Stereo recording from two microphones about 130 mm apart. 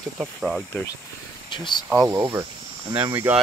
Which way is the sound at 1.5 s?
35° left (ahead or behind).